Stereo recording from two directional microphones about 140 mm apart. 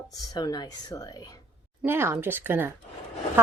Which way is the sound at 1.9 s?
15° right (ahead or behind).